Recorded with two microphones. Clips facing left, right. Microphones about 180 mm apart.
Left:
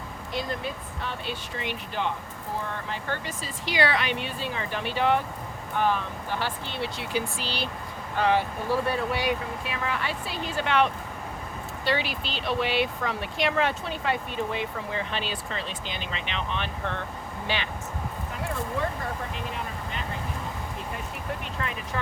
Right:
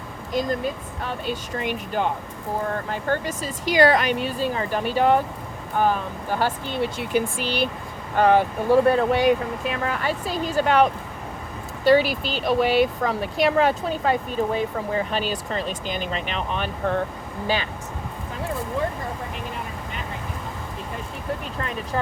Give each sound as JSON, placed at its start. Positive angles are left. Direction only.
{"t": 0.3, "sound": "speech", "side_deg": -45}